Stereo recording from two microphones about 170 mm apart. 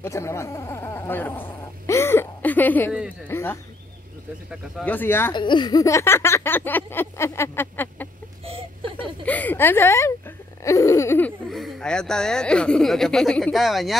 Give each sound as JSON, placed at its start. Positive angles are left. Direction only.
{"t": 0.0, "sound": "a sound", "side_deg": 15}
{"t": 3.3, "sound": "speech", "side_deg": 15}
{"t": 4.8, "sound": "speech", "side_deg": 10}
{"t": 5.3, "sound": "speech", "side_deg": 25}
{"t": 9.2, "sound": "speech", "side_deg": 10}
{"t": 10.6, "sound": "a sound", "side_deg": 20}
{"t": 11.5, "sound": "speech", "side_deg": 0}